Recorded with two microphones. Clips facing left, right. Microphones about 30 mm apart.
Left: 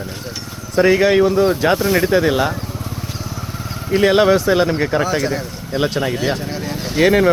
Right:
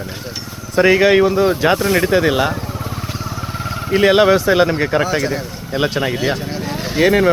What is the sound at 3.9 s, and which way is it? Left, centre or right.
Speech, centre.